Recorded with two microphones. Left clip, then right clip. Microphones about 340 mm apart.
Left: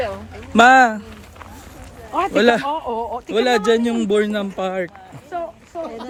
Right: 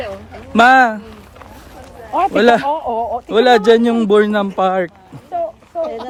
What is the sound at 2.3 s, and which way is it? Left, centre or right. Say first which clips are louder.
Speech: right 3 dB; centre.